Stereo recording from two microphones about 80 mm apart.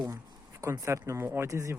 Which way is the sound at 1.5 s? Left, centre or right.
Right.